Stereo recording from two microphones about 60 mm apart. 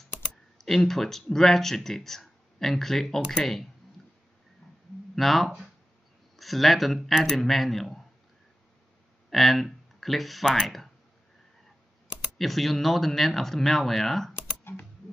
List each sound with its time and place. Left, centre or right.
0.3 s speech: centre
5.1 s speech: centre
9.3 s speech: centre
12.4 s speech: centre
14.6 s typing: left